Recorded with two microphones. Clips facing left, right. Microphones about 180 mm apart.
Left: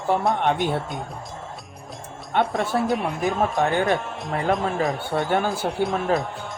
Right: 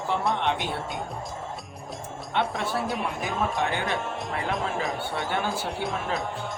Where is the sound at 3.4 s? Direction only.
45° left (ahead or behind).